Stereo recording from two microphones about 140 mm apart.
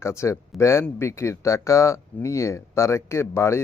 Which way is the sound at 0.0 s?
20° left (ahead or behind).